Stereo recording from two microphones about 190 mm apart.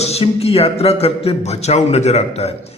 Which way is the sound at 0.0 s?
30° left (ahead or behind).